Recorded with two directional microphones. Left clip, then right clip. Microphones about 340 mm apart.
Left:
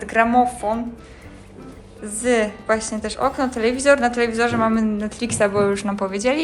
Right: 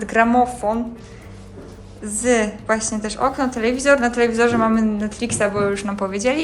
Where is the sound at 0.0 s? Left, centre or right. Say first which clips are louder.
Even; centre.